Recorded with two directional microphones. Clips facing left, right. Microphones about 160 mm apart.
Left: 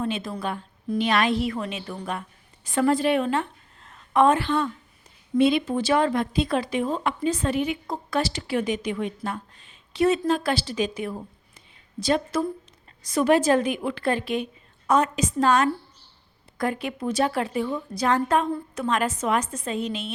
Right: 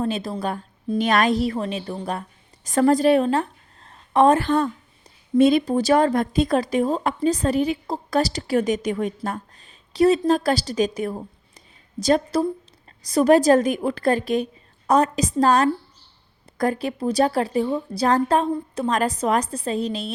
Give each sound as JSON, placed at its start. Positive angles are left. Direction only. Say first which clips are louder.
{"t": 0.0, "sound": "a woman's voice", "louder": "right 3 dB", "side_deg": -35}